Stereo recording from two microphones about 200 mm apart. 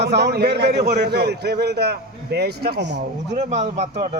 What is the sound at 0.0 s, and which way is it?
A man's voice, 55° right (ahead or behind).